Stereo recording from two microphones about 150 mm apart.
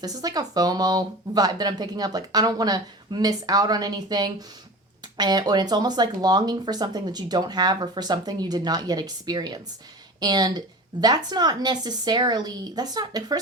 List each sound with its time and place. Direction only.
0.0 s speech: 25° right (ahead or behind)